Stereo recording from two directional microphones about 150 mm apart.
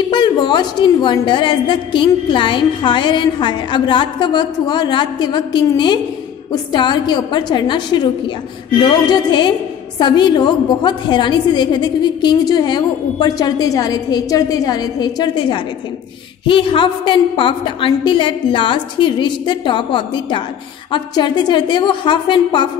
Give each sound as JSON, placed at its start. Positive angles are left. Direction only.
{"t": 0.1, "sound": "a woman's voice", "side_deg": 30}